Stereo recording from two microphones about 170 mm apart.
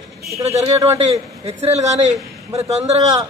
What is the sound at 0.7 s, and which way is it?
Speech, 20° right (ahead or behind).